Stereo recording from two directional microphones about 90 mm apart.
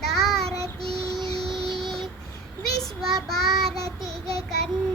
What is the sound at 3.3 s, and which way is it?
Child singing, centre (ahead or behind).